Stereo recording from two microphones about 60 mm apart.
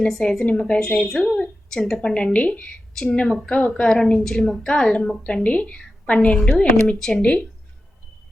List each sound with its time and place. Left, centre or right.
0.0 s a woman's voice: centre
2.9 s a woman's voice: centre
3.9 s a woman's voice: centre